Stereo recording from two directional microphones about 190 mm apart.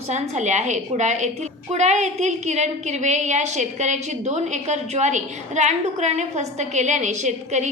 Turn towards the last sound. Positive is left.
turn(degrees=-40)  # may be behind; listen again after turning